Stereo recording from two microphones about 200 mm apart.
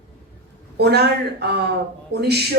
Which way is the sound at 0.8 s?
55° right (ahead or behind).